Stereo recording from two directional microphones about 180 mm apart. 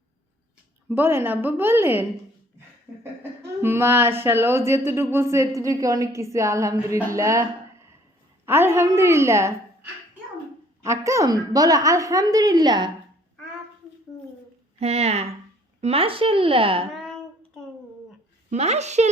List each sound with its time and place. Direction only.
0.9 s a woman's voice: 10° right (ahead or behind)
3.6 s a woman's voice: 15° right (ahead or behind)
10.8 s a woman's voice: 15° right (ahead or behind)
14.8 s speech: 35° right (ahead or behind)
16.9 s child singing: centre (ahead or behind)
18.5 s speech: 40° right (ahead or behind)